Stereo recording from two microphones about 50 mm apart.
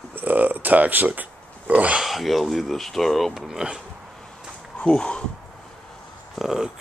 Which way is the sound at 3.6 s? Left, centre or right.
Centre.